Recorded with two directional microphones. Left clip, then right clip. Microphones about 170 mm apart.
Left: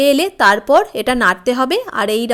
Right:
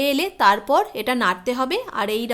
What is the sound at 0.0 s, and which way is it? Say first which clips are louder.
A woman's voice: left 6 dB; 30° left (ahead or behind).